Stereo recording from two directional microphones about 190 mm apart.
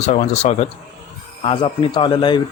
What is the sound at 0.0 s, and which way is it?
Speech, 35° left (ahead or behind).